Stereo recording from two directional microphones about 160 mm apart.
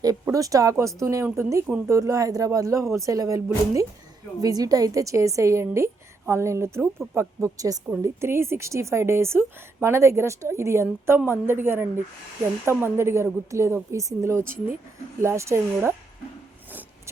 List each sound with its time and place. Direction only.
0.0 s a woman's voice: 20° right (ahead or behind)